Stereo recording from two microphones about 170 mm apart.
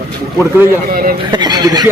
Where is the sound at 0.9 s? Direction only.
60° right (ahead or behind).